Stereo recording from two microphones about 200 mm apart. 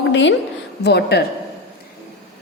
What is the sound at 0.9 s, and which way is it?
Speech, 55° left (ahead or behind).